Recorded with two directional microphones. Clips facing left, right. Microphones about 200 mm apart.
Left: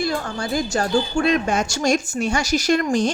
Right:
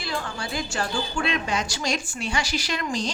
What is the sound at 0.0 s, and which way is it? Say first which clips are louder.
A woman's voice: left 7 dB; 45° left (ahead or behind).